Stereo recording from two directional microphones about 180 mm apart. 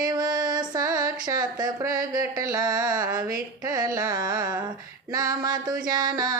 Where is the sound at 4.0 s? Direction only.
20° right (ahead or behind).